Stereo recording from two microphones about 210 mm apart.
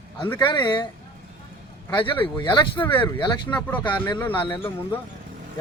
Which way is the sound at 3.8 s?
20° left (ahead or behind).